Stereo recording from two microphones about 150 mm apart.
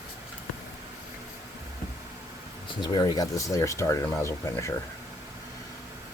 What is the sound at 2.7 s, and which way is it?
Speech, 25° left (ahead or behind).